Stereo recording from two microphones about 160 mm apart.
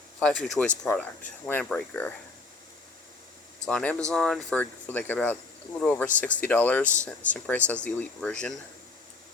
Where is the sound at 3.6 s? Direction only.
5° left (ahead or behind).